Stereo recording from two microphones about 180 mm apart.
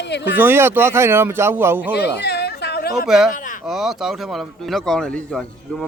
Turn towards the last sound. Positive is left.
turn(degrees=5)  # may be behind; listen again after turning